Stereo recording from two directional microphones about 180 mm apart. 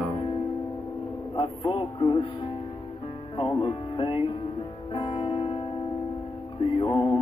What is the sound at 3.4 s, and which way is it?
Music, 25° left (ahead or behind).